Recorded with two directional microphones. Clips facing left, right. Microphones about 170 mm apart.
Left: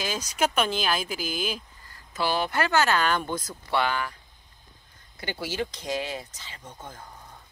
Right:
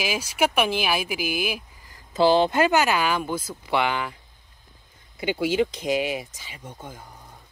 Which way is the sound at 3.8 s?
20° right (ahead or behind).